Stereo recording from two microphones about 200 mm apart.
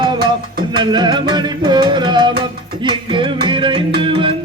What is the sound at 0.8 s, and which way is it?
Music, 20° right (ahead or behind).